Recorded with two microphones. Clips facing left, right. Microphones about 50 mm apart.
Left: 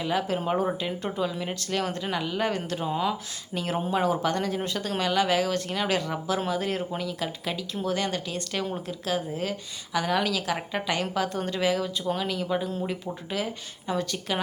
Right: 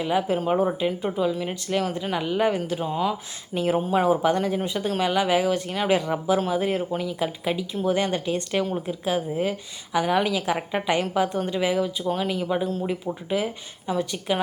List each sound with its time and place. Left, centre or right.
0.0 s speech: centre
2.6 s speech: centre
3.5 s speech: centre
3.8 s speech: centre
4.0 s a woman's voice: centre